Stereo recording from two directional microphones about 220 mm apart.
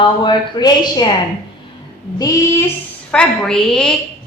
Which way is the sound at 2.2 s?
15° left (ahead or behind).